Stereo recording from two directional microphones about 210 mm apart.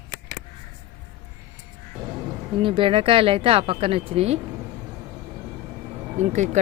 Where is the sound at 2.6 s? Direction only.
25° right (ahead or behind).